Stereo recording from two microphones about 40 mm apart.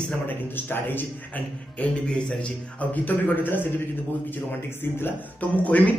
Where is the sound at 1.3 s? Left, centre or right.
Left.